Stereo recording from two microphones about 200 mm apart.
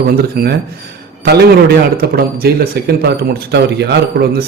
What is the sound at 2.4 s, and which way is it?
A man's voice, 55° right (ahead or behind).